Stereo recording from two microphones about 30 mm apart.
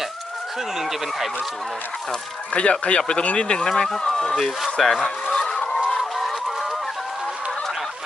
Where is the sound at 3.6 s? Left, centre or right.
Centre.